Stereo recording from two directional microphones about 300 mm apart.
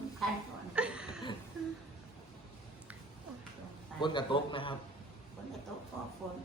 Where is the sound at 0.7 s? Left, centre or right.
Centre.